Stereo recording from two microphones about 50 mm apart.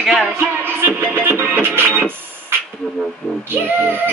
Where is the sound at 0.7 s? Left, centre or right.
Right.